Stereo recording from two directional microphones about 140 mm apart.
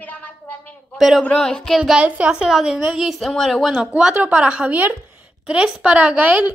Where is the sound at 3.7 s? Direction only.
10° right (ahead or behind).